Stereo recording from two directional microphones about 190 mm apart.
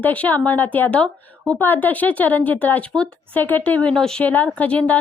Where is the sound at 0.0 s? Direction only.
10° left (ahead or behind).